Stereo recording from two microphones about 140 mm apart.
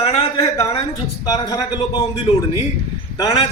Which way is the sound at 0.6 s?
30° left (ahead or behind).